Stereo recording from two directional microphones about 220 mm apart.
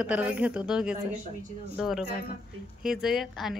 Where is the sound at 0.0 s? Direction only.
5° right (ahead or behind).